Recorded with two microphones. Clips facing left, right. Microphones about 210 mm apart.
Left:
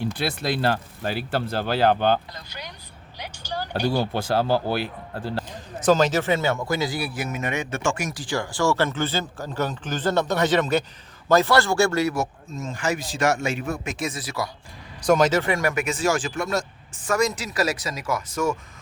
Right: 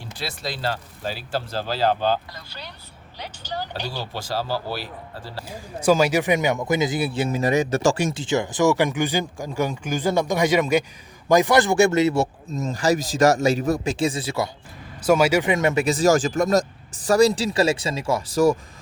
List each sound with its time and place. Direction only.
0.0 s speech: 60° left (ahead or behind)
2.5 s speech: 15° left (ahead or behind)
3.7 s speech: 55° left (ahead or behind)
5.5 s speech: 10° right (ahead or behind); by 14.5 s 25° right (ahead or behind)
15.0 s speech: 10° right (ahead or behind); by 18.5 s 35° right (ahead or behind)